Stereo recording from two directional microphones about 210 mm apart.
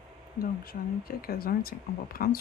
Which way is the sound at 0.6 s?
45° left (ahead or behind).